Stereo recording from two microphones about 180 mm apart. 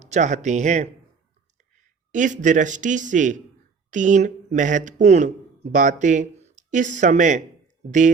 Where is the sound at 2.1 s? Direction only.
45° right (ahead or behind).